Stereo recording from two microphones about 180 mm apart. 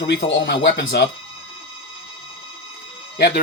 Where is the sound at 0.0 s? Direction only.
60° left (ahead or behind).